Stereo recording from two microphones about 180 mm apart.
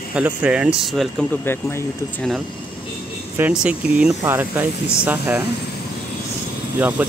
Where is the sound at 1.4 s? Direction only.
10° left (ahead or behind).